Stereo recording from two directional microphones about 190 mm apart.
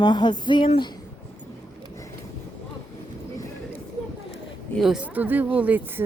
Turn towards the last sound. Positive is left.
turn(degrees=-10)  # may be behind; listen again after turning